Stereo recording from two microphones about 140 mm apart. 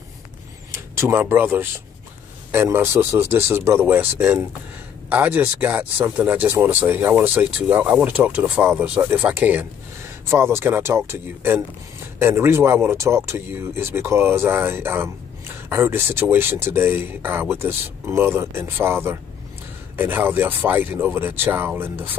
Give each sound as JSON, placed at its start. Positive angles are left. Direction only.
{"t": 0.7, "sound": "speech", "side_deg": -20}